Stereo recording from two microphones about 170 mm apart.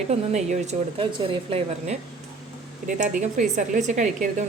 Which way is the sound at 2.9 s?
50° right (ahead or behind).